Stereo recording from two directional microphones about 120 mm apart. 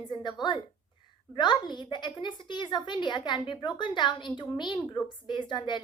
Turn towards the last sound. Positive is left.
turn(degrees=40)  # may be behind; listen again after turning